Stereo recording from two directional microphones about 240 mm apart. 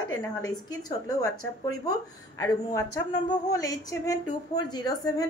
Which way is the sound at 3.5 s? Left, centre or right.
Centre.